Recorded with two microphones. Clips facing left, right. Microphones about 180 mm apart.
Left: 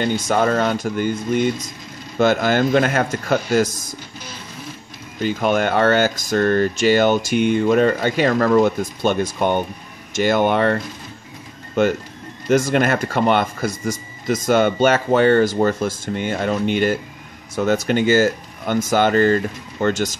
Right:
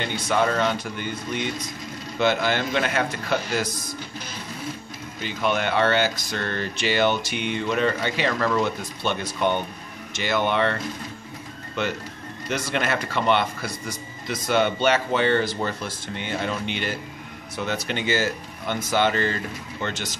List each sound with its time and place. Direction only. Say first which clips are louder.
0.0 s speech: left 5 dB; 45° left (ahead or behind)
5.2 s speech: left 6 dB; 45° left (ahead or behind)